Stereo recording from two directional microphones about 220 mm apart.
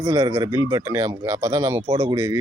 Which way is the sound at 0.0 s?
15° right (ahead or behind).